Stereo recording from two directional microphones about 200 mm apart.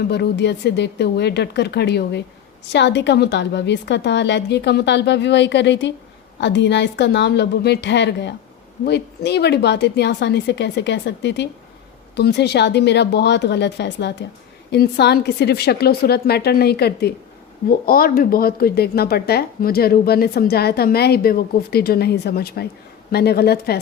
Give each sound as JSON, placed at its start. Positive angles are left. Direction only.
{"t": 0.1, "sound": "a woman's voice", "side_deg": 55}